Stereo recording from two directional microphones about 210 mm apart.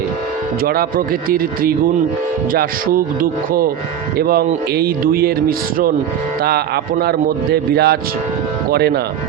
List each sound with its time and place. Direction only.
0.6 s speech: 45° right (ahead or behind)
7.0 s speech: 50° right (ahead or behind)